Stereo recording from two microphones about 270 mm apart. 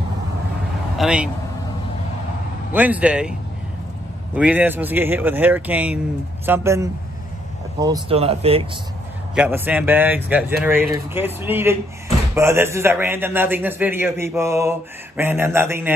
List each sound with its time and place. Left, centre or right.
0.9 s speech: centre
2.7 s speech: centre
4.4 s a man's voice: centre; by 8.6 s right
9.3 s a man's voice: centre